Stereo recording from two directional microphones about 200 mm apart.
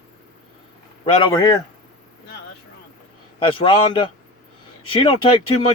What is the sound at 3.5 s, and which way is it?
Speech, 25° left (ahead or behind).